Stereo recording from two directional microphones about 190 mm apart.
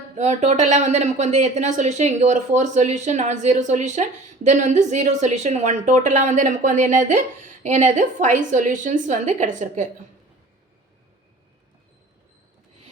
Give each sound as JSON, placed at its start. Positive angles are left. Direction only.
{"t": 0.2, "sound": "speech", "side_deg": -35}